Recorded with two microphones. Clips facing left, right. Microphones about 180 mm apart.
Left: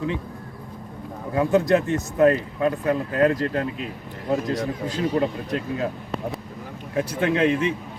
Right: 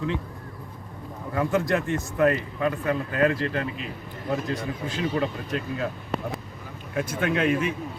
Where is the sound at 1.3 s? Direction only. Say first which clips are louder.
Left 5 dB; 20° left (ahead or behind).